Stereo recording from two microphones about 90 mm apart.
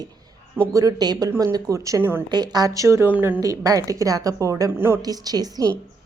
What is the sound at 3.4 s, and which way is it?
A woman's voice, 40° right (ahead or behind).